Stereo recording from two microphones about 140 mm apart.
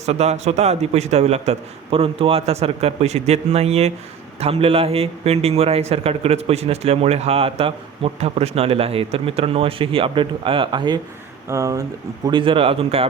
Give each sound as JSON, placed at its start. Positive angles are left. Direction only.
{"t": 0.0, "sound": "a man's voice", "side_deg": -50}
{"t": 12.3, "sound": "speech", "side_deg": -40}